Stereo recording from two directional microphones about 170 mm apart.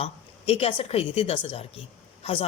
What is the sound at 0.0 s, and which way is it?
Speech, 35° left (ahead or behind).